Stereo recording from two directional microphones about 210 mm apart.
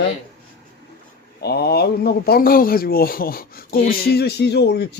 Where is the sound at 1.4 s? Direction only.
50° left (ahead or behind).